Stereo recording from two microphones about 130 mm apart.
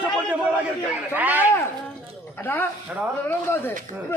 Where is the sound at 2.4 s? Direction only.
15° left (ahead or behind).